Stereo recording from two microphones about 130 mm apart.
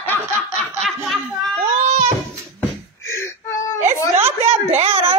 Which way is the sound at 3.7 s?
20° right (ahead or behind).